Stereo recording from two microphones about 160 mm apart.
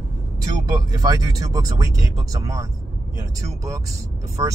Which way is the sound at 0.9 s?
25° right (ahead or behind).